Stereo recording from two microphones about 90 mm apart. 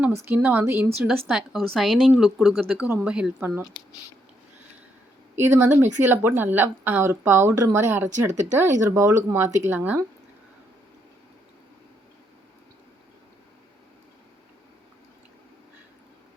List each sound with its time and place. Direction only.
0.1 s speech: 30° right (ahead or behind)
1.3 s speech: centre (ahead or behind)
5.4 s speech: 30° right (ahead or behind)